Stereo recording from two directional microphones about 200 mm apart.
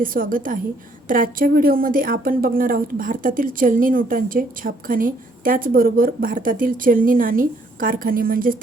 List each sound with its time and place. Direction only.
0.0 s speech: 45° right (ahead or behind)